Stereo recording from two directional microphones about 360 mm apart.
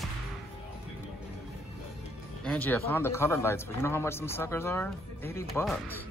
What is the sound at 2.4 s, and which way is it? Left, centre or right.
A man's voice, centre.